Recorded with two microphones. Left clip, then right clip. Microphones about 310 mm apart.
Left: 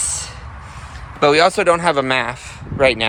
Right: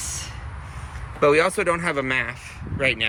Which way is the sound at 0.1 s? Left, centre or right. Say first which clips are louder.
Left 6 dB; centre.